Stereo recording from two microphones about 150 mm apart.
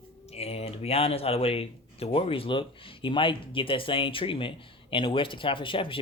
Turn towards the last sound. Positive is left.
turn(degrees=35)  # may be behind; listen again after turning